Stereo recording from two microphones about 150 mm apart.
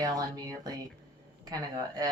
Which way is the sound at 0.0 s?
25° right (ahead or behind).